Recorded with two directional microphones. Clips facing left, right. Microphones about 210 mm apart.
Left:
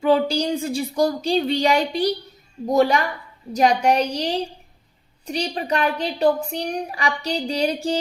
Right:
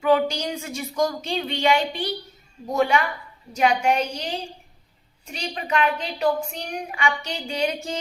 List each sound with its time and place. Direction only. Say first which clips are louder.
0.0 s a woman's voice: left 2 dB; 30° left (ahead or behind)